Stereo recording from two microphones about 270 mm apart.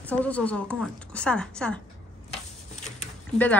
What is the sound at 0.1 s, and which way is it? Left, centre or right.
A woman's voice, centre.